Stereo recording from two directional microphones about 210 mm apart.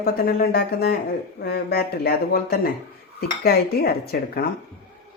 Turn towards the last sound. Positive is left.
turn(degrees=45)  # may be behind; listen again after turning